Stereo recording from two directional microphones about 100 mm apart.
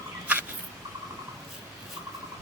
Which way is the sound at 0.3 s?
15° right (ahead or behind).